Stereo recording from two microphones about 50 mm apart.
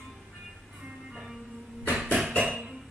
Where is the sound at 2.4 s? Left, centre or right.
Centre.